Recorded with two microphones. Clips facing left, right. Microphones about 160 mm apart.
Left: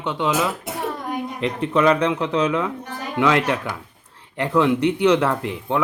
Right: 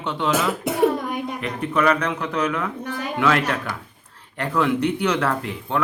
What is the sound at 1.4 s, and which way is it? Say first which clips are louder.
Speech: left 4 dB; 25° left (ahead or behind).